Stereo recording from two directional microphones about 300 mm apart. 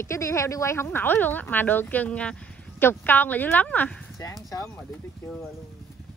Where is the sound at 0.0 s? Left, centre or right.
Centre.